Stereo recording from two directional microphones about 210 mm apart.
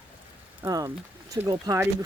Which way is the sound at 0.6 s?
15° right (ahead or behind).